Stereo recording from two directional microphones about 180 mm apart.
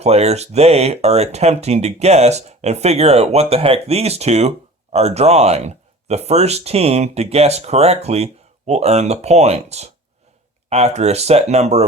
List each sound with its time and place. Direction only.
0.0 s speech: 35° right (ahead or behind)